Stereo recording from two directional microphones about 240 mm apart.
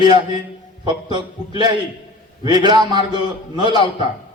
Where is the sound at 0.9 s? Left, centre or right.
Centre.